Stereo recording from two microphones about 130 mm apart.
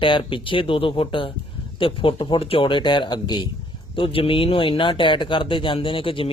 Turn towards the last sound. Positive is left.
turn(degrees=45)  # may be behind; listen again after turning